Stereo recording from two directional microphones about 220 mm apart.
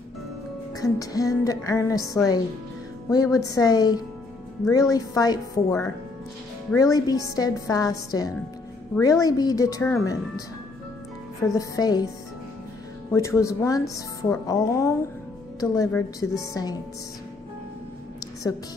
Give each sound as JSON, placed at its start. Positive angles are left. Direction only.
{"t": 0.7, "sound": "speech", "side_deg": 15}
{"t": 11.4, "sound": "speech", "side_deg": 15}
{"t": 13.1, "sound": "speech", "side_deg": 15}